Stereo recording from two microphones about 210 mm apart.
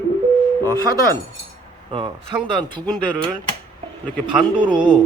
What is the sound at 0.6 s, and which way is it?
Speech, 10° left (ahead or behind).